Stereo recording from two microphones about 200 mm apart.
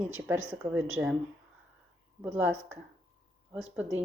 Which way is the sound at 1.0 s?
10° right (ahead or behind).